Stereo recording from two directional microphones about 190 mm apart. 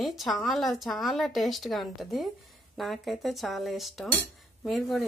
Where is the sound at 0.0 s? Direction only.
Centre (ahead or behind).